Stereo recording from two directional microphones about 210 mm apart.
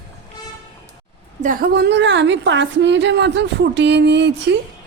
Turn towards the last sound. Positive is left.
turn(degrees=-55)  # may be behind; listen again after turning